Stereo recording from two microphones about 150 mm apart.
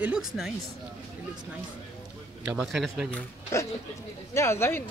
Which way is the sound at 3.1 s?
20° left (ahead or behind).